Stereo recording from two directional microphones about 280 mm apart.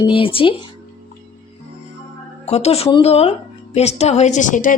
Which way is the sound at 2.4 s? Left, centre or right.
Left.